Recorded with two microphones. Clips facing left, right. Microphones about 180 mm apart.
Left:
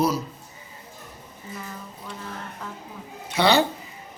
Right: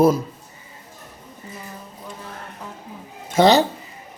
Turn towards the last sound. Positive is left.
turn(degrees=-40)  # may be behind; listen again after turning